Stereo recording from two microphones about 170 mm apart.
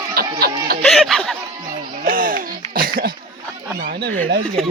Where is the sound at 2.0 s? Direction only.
55° right (ahead or behind).